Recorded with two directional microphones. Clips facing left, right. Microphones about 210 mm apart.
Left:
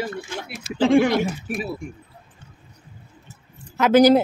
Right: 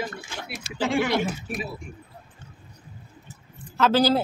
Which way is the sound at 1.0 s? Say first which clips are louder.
Left 4 dB; 45° left (ahead or behind).